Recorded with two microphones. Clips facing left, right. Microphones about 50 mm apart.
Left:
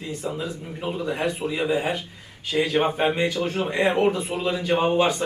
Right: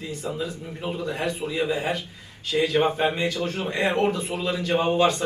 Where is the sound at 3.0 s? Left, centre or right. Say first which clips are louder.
Left 2 dB; centre.